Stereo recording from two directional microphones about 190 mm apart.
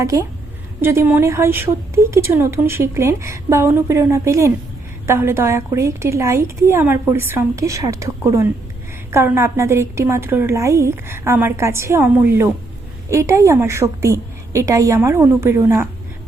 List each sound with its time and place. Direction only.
0.0 s a woman's voice: 15° right (ahead or behind)